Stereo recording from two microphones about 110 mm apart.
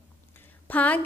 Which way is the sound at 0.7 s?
15° left (ahead or behind).